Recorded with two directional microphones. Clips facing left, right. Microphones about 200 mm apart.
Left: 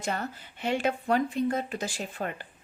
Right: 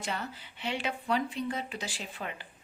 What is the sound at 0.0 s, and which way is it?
Speech, 45° left (ahead or behind).